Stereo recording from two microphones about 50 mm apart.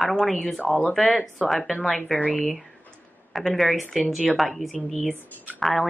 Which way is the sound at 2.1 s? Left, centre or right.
Left.